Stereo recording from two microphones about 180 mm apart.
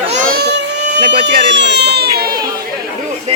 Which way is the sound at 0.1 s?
50° right (ahead or behind).